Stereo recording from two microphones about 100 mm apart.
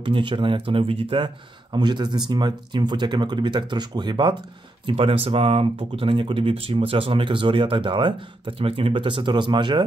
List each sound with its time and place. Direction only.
0.0 s speech: 55° right (ahead or behind)
4.8 s speech: 70° right (ahead or behind); by 9.8 s 50° right (ahead or behind)